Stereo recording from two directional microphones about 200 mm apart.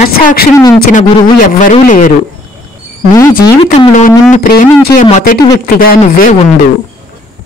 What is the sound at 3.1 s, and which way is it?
Speech, 20° left (ahead or behind).